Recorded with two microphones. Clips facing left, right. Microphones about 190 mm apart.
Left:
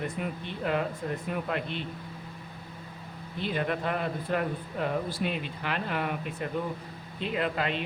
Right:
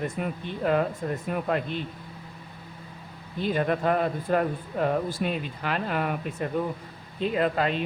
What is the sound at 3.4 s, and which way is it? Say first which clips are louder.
Speech: right 5 dB; 45° right (ahead or behind).